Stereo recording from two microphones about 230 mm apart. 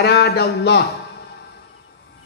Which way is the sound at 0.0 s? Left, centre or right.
Left.